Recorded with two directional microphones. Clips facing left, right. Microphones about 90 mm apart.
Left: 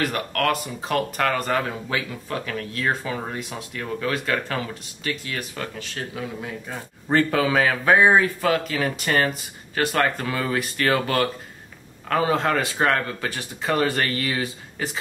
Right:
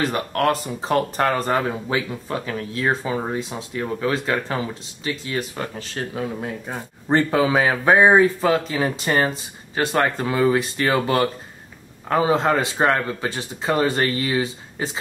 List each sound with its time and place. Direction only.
0.0 s speech: 25° right (ahead or behind)
5.8 s speech: 35° right (ahead or behind)